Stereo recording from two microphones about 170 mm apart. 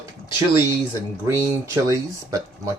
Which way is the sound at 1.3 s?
15° right (ahead or behind).